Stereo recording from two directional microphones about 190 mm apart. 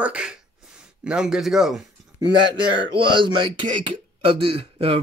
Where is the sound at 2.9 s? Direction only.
25° right (ahead or behind).